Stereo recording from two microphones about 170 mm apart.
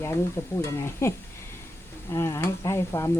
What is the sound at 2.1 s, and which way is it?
Stir, 15° left (ahead or behind).